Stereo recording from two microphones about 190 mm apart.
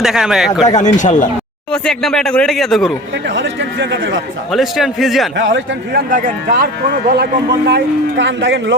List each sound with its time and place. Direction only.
0.0 s speech: centre (ahead or behind)
0.6 s speech: 35° left (ahead or behind)
1.7 s speech: 5° left (ahead or behind)
3.2 s a man's voice: 65° right (ahead or behind)
4.5 s speech: centre (ahead or behind)
5.4 s a man's voice: 75° right (ahead or behind)
6.1 s speech: 45° right (ahead or behind)
8.2 s a man's voice: 70° right (ahead or behind)